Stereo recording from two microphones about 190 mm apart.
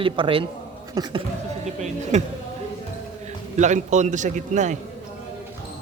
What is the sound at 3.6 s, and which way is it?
A man's voice, 40° right (ahead or behind).